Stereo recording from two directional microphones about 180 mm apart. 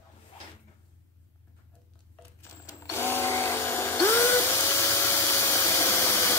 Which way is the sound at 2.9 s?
15° left (ahead or behind).